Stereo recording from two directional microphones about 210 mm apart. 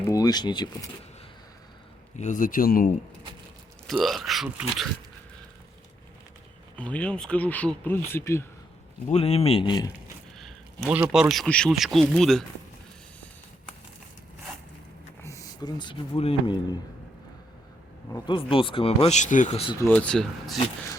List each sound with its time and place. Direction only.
0.0 s speech: 15° left (ahead or behind)
2.1 s speech: 35° left (ahead or behind)
3.8 s speech: centre (ahead or behind)
6.7 s speech: 5° left (ahead or behind)
9.0 s speech: 30° left (ahead or behind)
10.3 s speech: centre (ahead or behind)
15.2 s speech: 15° left (ahead or behind)
18.1 s speech: 20° left (ahead or behind)
19.8 s speech: 5° left (ahead or behind)